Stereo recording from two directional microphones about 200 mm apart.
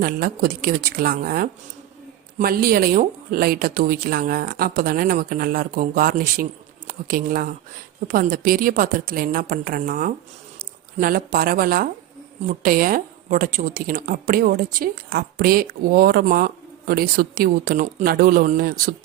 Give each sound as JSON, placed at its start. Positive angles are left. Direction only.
{"t": 0.0, "sound": "speech", "side_deg": -45}